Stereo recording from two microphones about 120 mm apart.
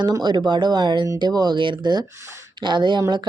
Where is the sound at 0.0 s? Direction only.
40° right (ahead or behind).